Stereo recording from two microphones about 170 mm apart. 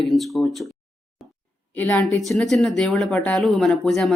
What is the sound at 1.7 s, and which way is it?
A woman's voice, 10° left (ahead or behind).